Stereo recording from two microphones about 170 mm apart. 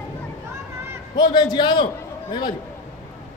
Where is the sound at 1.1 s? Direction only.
25° left (ahead or behind).